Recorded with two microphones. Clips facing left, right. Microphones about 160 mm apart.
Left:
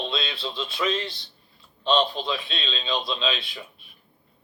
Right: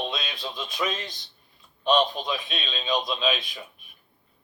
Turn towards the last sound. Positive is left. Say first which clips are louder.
# right 1 dB
turn(degrees=-20)  # may be behind; listen again after turning